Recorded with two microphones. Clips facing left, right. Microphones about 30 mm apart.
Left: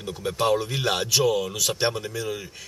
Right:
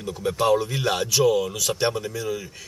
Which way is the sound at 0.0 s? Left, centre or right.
Centre.